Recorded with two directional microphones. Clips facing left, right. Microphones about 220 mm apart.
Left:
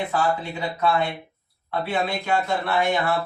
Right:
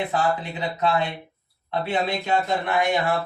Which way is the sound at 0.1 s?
20° right (ahead or behind).